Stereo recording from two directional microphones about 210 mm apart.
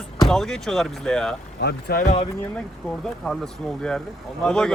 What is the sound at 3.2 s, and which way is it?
Speech, 5° left (ahead or behind).